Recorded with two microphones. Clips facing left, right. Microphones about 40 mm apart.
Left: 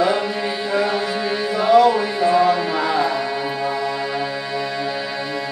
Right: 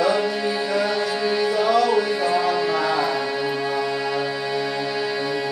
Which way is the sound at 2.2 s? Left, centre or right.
Left.